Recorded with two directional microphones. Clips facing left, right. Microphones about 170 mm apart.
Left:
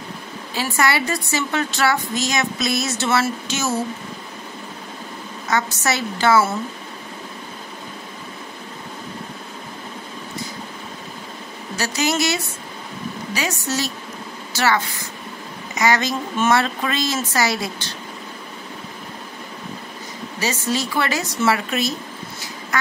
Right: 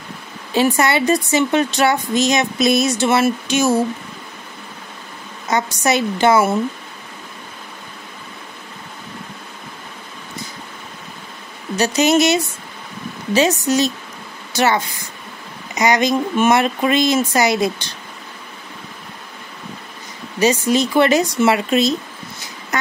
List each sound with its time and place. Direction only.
0.6 s a woman's voice: 20° right (ahead or behind)
5.5 s a woman's voice: 20° right (ahead or behind)
11.7 s a woman's voice: 20° right (ahead or behind)
20.3 s a woman's voice: 20° right (ahead or behind)